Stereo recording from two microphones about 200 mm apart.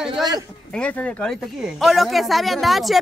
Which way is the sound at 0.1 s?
20° right (ahead or behind).